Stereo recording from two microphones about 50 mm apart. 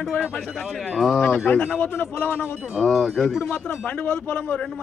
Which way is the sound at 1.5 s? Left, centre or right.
Left.